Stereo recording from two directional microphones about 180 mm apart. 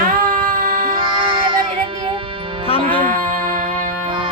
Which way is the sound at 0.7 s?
25° right (ahead or behind).